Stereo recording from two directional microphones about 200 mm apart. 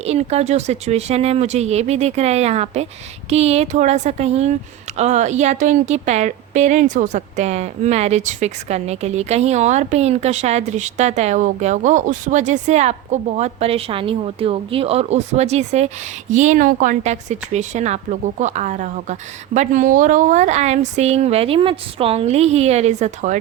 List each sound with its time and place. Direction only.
0.0 s a woman's voice: 30° right (ahead or behind)